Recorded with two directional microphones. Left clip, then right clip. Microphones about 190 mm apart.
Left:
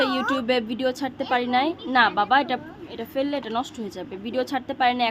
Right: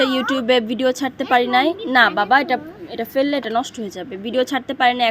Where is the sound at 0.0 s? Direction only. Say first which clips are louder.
Right 4 dB; 15° right (ahead or behind).